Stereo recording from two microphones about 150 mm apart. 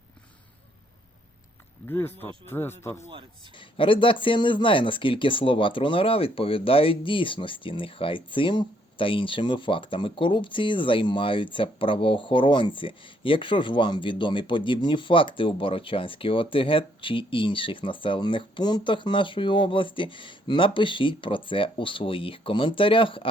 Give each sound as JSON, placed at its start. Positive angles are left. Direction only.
{"t": 1.9, "sound": "speech", "side_deg": 15}
{"t": 3.1, "sound": "speech", "side_deg": -35}
{"t": 3.5, "sound": "speech", "side_deg": 35}